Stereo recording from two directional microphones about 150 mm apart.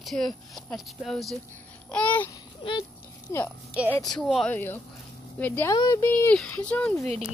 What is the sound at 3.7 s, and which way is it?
Speech, 10° right (ahead or behind).